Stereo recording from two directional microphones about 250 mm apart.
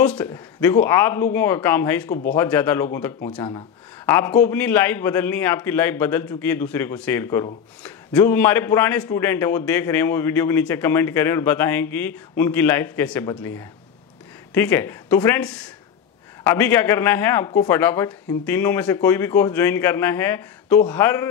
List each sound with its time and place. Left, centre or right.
0.0 s speech: centre
2.0 s speech: left
2.3 s speech: centre
4.0 s speech: centre
14.5 s speech: centre